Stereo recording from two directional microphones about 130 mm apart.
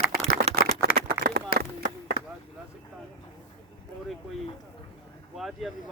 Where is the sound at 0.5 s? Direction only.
50° right (ahead or behind).